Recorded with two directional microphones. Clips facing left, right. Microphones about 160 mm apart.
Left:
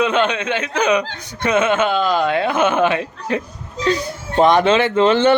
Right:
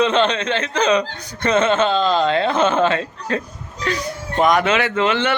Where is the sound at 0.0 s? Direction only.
10° left (ahead or behind).